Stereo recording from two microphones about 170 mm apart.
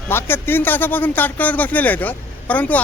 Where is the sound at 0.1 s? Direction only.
15° left (ahead or behind).